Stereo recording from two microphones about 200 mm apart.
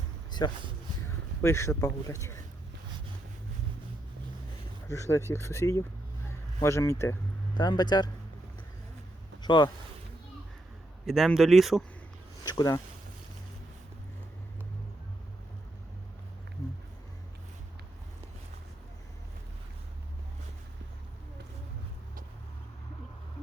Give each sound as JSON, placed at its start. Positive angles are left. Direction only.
{"t": 0.3, "sound": "a sound", "side_deg": 20}
{"t": 1.4, "sound": "a man's voice", "side_deg": 15}
{"t": 4.9, "sound": "a man's voice", "side_deg": 15}
{"t": 9.4, "sound": "speech", "side_deg": 20}
{"t": 11.0, "sound": "speech", "side_deg": 0}
{"t": 12.5, "sound": "a man's voice", "side_deg": 15}